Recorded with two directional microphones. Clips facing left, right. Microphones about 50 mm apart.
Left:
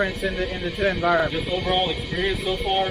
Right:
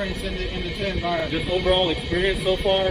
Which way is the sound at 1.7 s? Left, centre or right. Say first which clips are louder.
Right 3 dB; centre.